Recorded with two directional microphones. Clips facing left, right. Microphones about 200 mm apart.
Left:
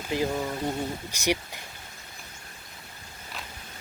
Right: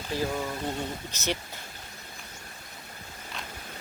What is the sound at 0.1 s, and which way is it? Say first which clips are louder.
Speech: left 2 dB; 20° left (ahead or behind).